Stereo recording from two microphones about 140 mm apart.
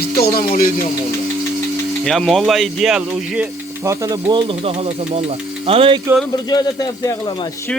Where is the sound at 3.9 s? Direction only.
25° right (ahead or behind).